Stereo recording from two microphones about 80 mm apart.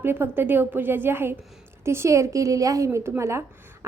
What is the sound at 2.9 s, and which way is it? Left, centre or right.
Speech, right.